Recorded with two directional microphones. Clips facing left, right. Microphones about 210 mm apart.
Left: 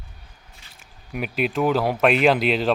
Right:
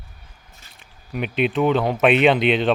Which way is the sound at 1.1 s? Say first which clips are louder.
Right 3 dB; 5° left (ahead or behind).